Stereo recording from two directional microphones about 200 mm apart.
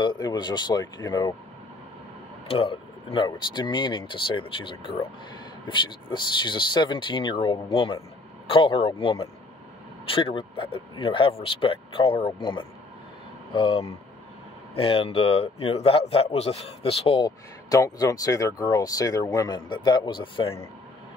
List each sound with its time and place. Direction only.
0.0 s a man's voice: 20° left (ahead or behind)
2.4 s a man's voice: 25° left (ahead or behind)